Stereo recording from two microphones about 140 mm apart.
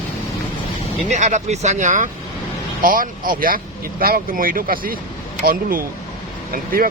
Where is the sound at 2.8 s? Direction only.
90° right.